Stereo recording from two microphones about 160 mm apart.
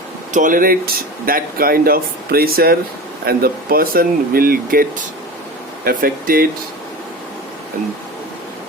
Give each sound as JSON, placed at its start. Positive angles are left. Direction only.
{"t": 0.3, "sound": "speech", "side_deg": -55}